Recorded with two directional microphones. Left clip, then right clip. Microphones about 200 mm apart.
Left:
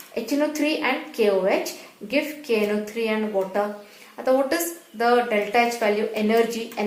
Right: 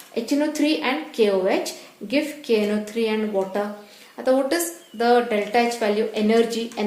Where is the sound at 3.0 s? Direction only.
40° right (ahead or behind).